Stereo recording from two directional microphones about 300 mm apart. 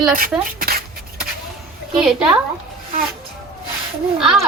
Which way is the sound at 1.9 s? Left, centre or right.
Centre.